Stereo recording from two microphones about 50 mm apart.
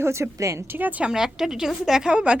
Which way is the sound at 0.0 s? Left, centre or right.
Right.